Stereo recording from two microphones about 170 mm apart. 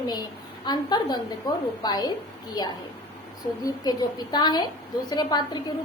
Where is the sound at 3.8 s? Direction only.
25° left (ahead or behind).